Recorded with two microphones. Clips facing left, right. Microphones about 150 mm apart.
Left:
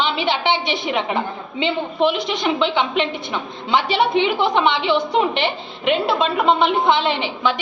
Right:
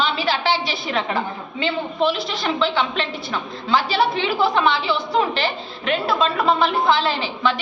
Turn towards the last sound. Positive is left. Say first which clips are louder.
# left 1 dB
turn(degrees=20)  # may be behind; listen again after turning